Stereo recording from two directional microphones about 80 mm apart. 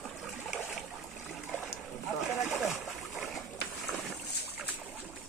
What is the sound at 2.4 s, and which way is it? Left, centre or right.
Splash, centre.